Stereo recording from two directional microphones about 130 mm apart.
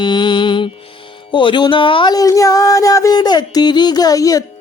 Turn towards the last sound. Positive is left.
turn(degrees=25)  # may be behind; listen again after turning